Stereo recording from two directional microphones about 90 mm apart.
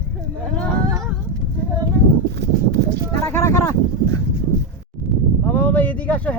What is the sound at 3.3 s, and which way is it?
Speech, 30° left (ahead or behind).